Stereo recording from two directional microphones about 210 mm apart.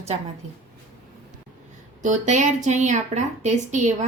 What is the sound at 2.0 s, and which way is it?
Speech, 35° right (ahead or behind).